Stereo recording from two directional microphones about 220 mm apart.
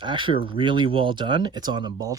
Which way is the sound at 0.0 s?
20° right (ahead or behind).